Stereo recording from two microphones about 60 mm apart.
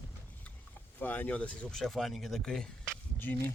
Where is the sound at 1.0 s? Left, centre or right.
Left.